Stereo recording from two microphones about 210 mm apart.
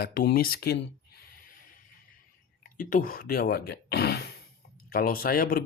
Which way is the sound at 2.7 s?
40° left (ahead or behind).